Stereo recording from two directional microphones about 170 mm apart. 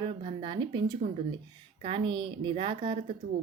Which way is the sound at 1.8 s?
30° right (ahead or behind).